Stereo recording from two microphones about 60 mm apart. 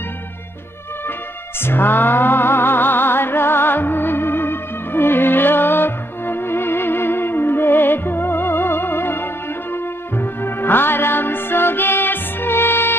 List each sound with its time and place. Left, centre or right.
1.6 s music: left